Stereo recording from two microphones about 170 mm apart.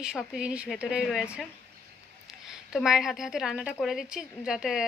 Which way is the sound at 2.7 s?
5° right (ahead or behind).